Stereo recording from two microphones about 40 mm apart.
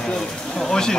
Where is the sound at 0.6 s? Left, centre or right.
Centre.